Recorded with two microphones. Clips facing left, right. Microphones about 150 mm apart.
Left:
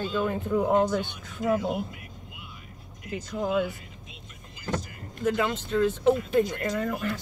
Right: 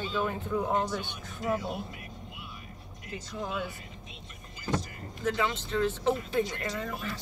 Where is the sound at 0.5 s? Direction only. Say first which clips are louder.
Left 6 dB; 25° left (ahead or behind).